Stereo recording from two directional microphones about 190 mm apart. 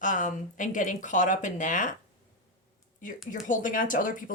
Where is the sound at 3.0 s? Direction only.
45° left (ahead or behind).